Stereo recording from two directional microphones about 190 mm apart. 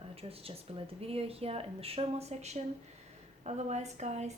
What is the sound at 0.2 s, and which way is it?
A woman's voice, 30° right (ahead or behind).